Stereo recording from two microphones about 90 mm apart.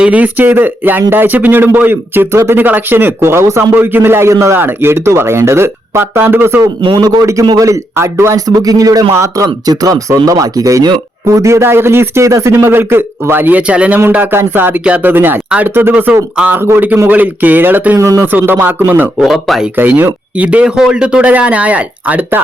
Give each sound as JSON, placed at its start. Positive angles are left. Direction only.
{"t": 0.0, "sound": "speech", "side_deg": -15}
{"t": 6.8, "sound": "a man's voice", "side_deg": -60}
{"t": 7.2, "sound": "speech", "side_deg": -35}
{"t": 8.4, "sound": "speech", "side_deg": -45}
{"t": 18.0, "sound": "speech", "side_deg": -35}
{"t": 18.3, "sound": "speech", "side_deg": -25}
{"t": 19.2, "sound": "speech", "side_deg": -5}
{"t": 19.7, "sound": "speech", "side_deg": -20}